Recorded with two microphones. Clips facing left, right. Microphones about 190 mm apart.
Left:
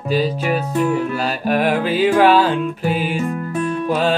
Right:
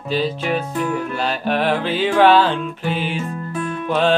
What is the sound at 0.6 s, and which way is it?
Music, 35° left (ahead or behind).